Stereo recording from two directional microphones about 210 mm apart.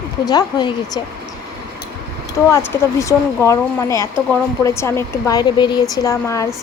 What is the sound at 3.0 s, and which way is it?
Speech, 15° left (ahead or behind).